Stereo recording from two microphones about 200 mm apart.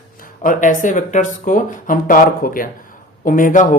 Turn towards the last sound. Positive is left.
turn(degrees=40)  # may be behind; listen again after turning